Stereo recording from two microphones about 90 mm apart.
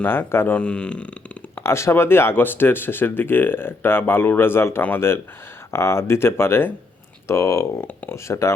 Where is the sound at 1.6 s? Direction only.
30° left (ahead or behind).